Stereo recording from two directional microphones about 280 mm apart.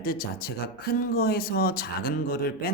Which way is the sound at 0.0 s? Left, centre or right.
Left.